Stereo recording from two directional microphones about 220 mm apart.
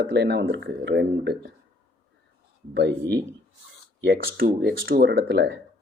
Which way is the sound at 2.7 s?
55° right (ahead or behind).